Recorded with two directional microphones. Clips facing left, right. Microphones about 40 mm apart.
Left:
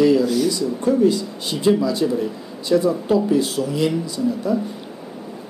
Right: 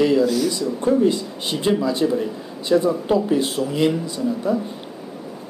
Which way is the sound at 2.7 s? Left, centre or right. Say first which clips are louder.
Even; right.